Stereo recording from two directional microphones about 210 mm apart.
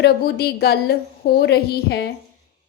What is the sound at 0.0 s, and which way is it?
A woman's voice, 50° left (ahead or behind).